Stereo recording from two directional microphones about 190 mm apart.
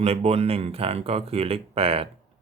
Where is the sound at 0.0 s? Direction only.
30° right (ahead or behind).